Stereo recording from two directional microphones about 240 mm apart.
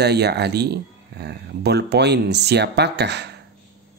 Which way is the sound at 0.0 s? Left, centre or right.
Right.